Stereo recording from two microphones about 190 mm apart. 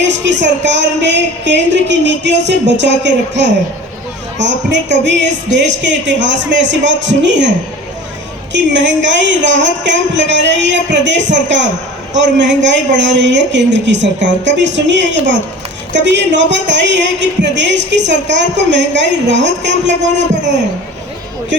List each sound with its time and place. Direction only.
0.0 s a woman's voice: 70° right (ahead or behind)
4.4 s a woman's voice: 70° right (ahead or behind)
8.5 s a woman's voice: 70° right (ahead or behind)
19.9 s speech: 40° right (ahead or behind)